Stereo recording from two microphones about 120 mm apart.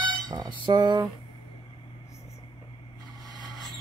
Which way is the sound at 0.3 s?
35° right (ahead or behind).